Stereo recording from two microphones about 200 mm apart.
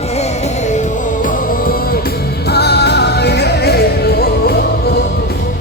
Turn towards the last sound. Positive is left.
turn(degrees=50)  # may be behind; listen again after turning